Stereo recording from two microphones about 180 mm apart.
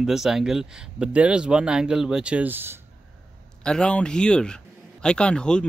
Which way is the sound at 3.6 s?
5° left (ahead or behind).